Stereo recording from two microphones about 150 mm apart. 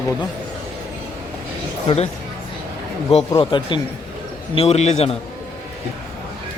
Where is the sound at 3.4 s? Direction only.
30° left (ahead or behind).